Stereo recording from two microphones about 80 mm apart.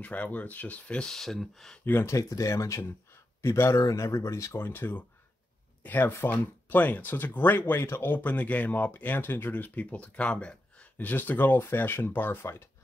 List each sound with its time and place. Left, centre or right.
0.0 s speech: centre
2.0 s speech: left